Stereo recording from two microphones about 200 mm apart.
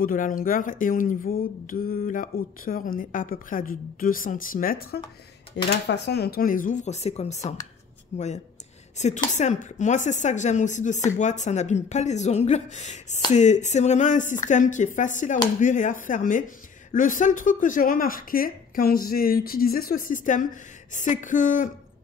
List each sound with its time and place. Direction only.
0.0 s speech: 40° left (ahead or behind)
5.9 s a woman's voice: 55° left (ahead or behind); by 21.6 s 40° left (ahead or behind)